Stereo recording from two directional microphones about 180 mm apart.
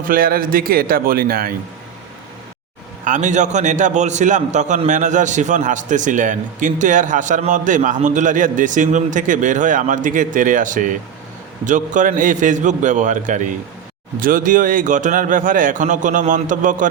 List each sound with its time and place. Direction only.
0.0 s a man's voice: 50° right (ahead or behind)
3.0 s a man's voice: 45° right (ahead or behind)